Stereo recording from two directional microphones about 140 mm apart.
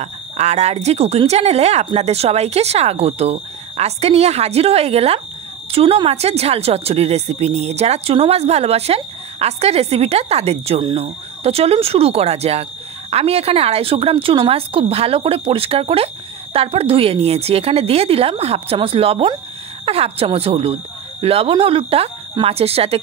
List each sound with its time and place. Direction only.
0.0 s a woman's voice: 55° right (ahead or behind)